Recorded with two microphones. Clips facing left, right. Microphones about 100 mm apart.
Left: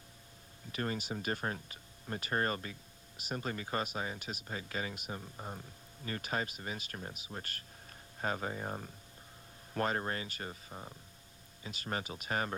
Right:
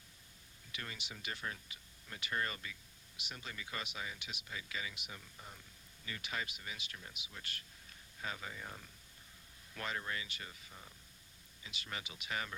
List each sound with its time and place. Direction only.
0.7 s speech: 40° left (ahead or behind)